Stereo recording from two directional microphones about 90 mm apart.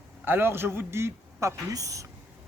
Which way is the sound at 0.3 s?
25° right (ahead or behind).